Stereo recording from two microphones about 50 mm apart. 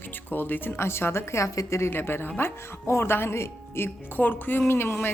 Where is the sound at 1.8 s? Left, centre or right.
Left.